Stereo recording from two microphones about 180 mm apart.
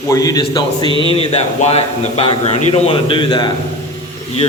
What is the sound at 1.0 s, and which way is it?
A man's voice, 30° left (ahead or behind).